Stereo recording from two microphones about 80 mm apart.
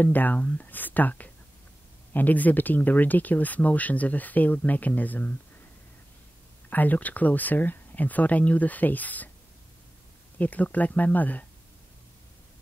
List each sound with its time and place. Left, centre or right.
0.0 s speech: left
6.7 s speech: left
10.3 s speech: centre